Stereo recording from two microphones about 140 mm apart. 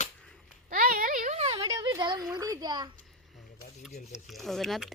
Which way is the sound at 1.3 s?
50° right (ahead or behind).